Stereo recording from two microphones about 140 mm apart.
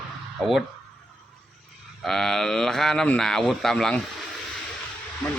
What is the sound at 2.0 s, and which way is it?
Speech, 5° left (ahead or behind).